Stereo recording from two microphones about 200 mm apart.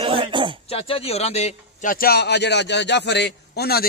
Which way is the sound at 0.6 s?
30° left (ahead or behind).